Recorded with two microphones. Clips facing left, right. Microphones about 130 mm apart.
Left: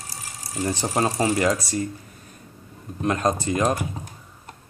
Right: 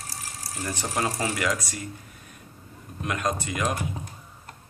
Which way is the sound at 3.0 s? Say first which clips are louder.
Left 6 dB; 35° left (ahead or behind).